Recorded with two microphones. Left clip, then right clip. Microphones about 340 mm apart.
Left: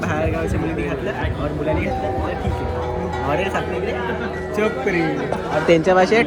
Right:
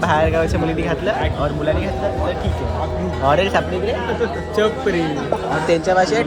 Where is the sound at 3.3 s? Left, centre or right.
Centre.